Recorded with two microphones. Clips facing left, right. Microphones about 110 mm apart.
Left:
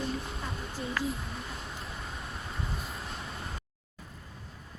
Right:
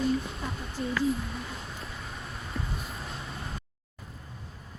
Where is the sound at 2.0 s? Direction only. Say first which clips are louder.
Even; centre (ahead or behind).